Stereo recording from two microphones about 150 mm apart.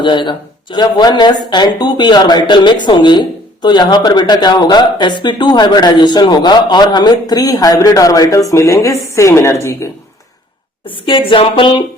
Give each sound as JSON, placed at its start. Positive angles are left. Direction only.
{"t": 0.0, "sound": "a man's voice", "side_deg": 30}
{"t": 10.8, "sound": "speech", "side_deg": 35}